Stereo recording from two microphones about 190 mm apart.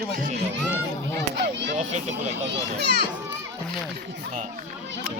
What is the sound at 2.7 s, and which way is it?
Speech, 60° right (ahead or behind).